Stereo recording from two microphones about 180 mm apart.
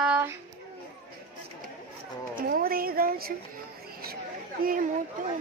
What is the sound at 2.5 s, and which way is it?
Speech, 55° right (ahead or behind).